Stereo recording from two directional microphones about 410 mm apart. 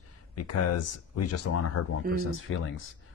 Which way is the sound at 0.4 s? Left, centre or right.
Left.